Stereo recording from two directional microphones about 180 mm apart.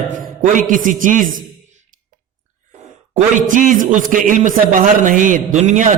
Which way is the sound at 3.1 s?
45° right (ahead or behind).